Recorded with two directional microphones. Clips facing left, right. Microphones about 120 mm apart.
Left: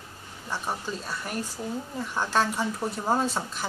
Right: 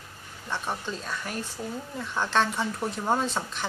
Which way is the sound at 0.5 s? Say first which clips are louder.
Even; 10° left (ahead or behind).